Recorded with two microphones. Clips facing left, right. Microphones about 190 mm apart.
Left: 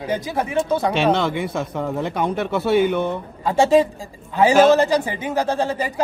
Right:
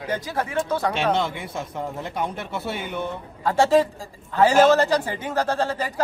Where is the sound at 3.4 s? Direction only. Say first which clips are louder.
Left 3 dB; 15° left (ahead or behind).